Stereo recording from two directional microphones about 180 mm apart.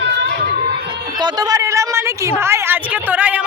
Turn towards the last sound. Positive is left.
turn(degrees=-5)  # may be behind; listen again after turning